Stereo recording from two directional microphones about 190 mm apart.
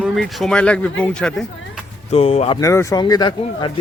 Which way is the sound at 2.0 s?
35° left (ahead or behind).